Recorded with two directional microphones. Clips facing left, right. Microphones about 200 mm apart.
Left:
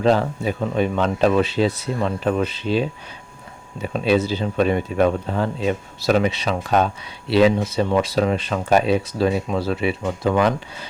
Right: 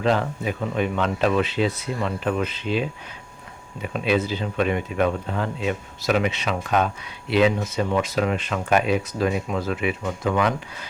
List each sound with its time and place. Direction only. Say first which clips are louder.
0.0 s speech: left 4 dB; 35° left (ahead or behind)